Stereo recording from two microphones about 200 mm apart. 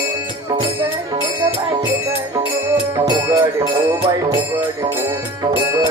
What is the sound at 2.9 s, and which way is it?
Music, 15° right (ahead or behind).